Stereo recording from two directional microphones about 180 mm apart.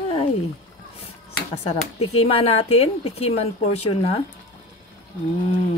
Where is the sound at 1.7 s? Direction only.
35° left (ahead or behind).